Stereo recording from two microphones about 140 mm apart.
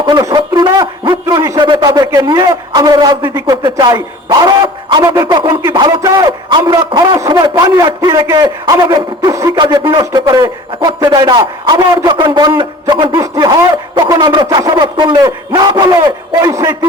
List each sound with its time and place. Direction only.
0.0 s speech: 30° right (ahead or behind)
13.1 s a sound: 25° right (ahead or behind)
14.2 s speech: 35° right (ahead or behind)
16.0 s a man's voice: 20° right (ahead or behind)